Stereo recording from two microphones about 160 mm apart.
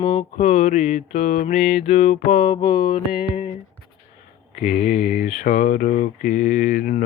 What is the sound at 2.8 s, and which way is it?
Mantra, 65° left (ahead or behind).